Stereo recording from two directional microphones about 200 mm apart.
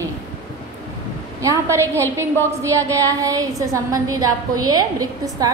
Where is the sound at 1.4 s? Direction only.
15° right (ahead or behind).